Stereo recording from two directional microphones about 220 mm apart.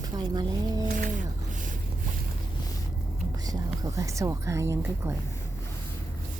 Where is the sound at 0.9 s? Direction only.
40° right (ahead or behind).